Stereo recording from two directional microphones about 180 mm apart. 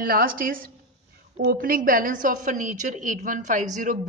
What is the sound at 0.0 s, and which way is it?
A woman's voice, 50° right (ahead or behind).